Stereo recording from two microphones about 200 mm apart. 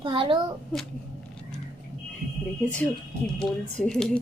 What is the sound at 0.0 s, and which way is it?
Speech, 25° right (ahead or behind).